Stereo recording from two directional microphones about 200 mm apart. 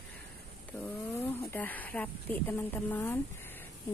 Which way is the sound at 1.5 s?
10° left (ahead or behind).